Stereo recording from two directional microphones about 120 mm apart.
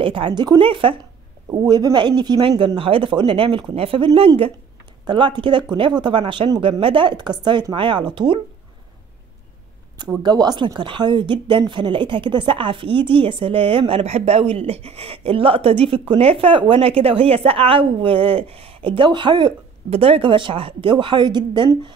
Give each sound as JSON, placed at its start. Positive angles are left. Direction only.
{"t": 0.0, "sound": "speech", "side_deg": -45}
{"t": 1.5, "sound": "a woman's voice", "side_deg": -35}
{"t": 10.2, "sound": "speech", "side_deg": -35}
{"t": 19.9, "sound": "speech", "side_deg": -55}